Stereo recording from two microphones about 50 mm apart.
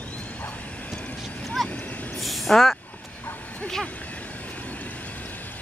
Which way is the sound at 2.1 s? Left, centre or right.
Centre.